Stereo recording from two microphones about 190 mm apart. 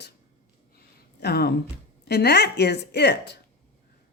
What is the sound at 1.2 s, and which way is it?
Speech, 55° left (ahead or behind).